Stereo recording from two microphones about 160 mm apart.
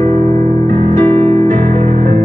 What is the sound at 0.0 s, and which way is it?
Music, 45° right (ahead or behind).